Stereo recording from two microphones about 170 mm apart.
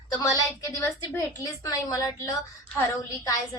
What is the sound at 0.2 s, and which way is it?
A woman's voice, 15° left (ahead or behind).